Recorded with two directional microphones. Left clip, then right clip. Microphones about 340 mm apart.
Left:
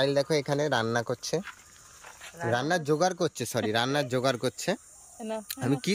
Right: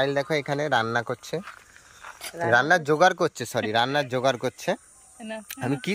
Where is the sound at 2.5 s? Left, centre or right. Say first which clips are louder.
Right 7 dB; centre.